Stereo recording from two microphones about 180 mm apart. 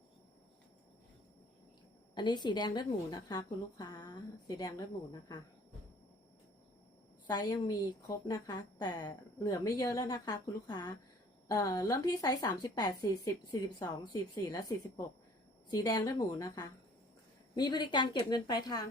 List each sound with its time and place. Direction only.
2.1 s a woman's voice: 25° left (ahead or behind)
7.3 s a woman's voice: 20° left (ahead or behind)